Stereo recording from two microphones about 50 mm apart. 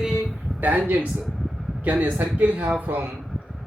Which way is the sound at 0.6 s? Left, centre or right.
Right.